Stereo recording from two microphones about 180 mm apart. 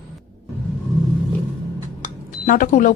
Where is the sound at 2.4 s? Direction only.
50° left (ahead or behind).